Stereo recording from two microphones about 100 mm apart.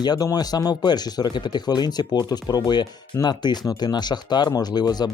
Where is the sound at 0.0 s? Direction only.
40° left (ahead or behind).